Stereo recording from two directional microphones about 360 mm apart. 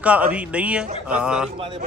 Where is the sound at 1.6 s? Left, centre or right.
Centre.